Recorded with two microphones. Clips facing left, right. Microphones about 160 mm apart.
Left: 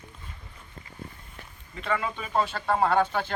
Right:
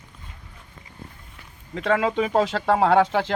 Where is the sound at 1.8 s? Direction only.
80° right.